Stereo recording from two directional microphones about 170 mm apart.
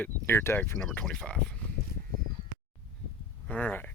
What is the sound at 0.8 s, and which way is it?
Speech, 5° left (ahead or behind).